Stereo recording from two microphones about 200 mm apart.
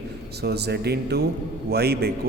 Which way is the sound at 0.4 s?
55° right (ahead or behind).